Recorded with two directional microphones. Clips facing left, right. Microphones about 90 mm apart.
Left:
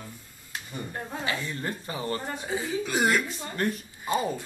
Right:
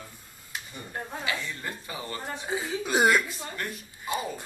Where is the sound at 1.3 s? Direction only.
35° left (ahead or behind).